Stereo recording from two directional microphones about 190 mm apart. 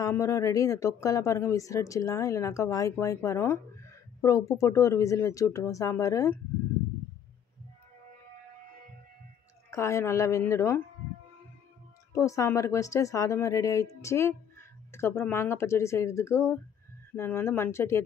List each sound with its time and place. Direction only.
0.0 s speech: 15° left (ahead or behind)
9.7 s speech: 15° left (ahead or behind)
12.1 s speech: 15° left (ahead or behind)